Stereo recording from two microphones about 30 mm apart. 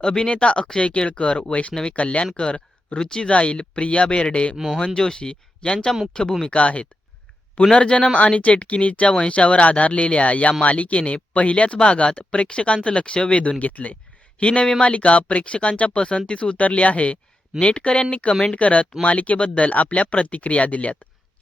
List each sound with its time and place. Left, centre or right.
0.0 s speech: left
3.2 s speech: left
4.5 s speech: centre
4.9 s speech: left
6.5 s speech: left
13.7 s speech: left
14.3 s speech: left
16.6 s speech: left
17.6 s speech: left
18.3 s speech: left
18.5 s speech: left